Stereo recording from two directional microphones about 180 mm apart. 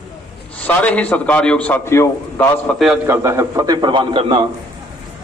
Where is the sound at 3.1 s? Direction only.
15° right (ahead or behind).